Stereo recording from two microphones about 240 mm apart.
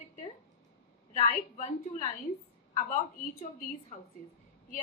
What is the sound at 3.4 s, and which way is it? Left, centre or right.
Speech, left.